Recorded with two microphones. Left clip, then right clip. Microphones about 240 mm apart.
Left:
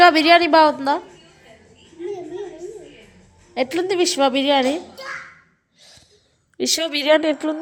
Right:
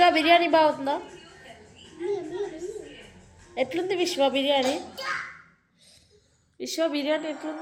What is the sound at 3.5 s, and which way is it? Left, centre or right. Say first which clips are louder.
A woman's voice: left 6 dB; left.